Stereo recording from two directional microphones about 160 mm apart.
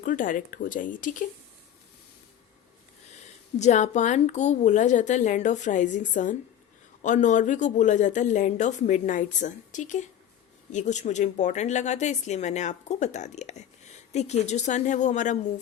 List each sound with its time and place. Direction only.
0.0 s speech: 55° left (ahead or behind)
3.6 s speech: 50° left (ahead or behind)